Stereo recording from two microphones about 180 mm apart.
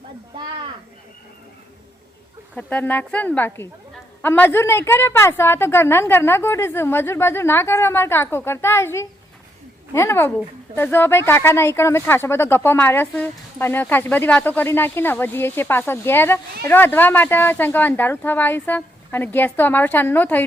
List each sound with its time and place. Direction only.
2.6 s speech: 10° left (ahead or behind)